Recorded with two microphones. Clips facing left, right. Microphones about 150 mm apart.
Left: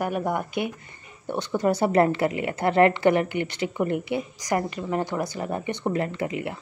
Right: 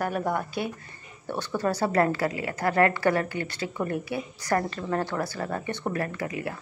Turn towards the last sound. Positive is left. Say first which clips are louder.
# left 3 dB
turn(degrees=20)  # may be behind; listen again after turning